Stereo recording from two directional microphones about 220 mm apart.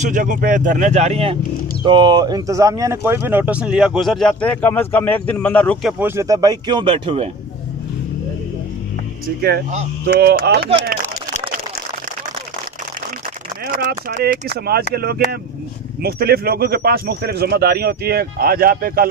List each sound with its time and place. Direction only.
0.0 s speech: 35° right (ahead or behind)
10.0 s speech: 45° right (ahead or behind)
14.0 s speech: 45° right (ahead or behind)